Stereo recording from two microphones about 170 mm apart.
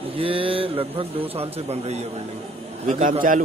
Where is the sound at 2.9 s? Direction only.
50° right (ahead or behind).